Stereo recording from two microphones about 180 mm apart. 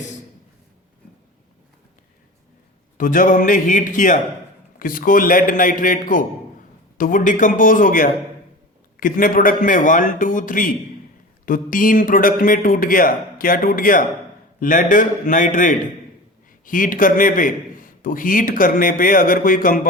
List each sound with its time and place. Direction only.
3.0 s a man's voice: 45° left (ahead or behind)